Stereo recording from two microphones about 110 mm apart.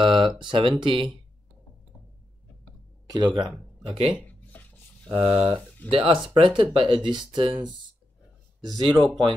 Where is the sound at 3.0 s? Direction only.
40° right (ahead or behind).